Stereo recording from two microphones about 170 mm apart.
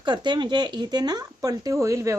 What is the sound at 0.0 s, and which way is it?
Speech, 25° right (ahead or behind).